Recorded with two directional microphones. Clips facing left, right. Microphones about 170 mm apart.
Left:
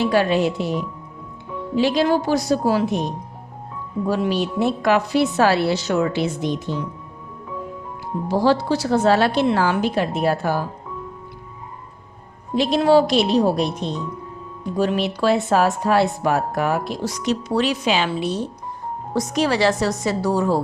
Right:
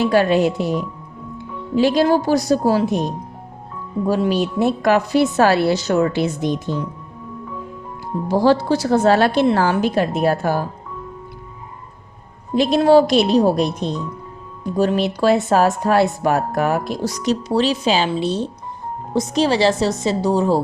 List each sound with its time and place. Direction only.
0.0 s a woman's voice: 45° right (ahead or behind)
4.1 s a woman's voice: 40° right (ahead or behind)
8.3 s a woman's voice: 45° right (ahead or behind)
12.5 s a woman's voice: 45° right (ahead or behind)
14.8 s a woman's voice: 45° right (ahead or behind); by 20.6 s 25° right (ahead or behind)